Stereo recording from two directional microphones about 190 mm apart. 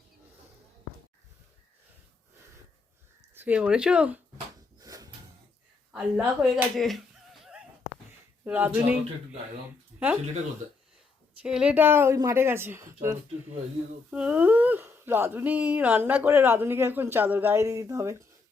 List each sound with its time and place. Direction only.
3.3 s speech: 10° right (ahead or behind)
4.8 s drawer open or close: 20° right (ahead or behind)
5.9 s speech: 5° right (ahead or behind)
8.4 s speech: 10° right (ahead or behind)
11.4 s speech: 5° right (ahead or behind)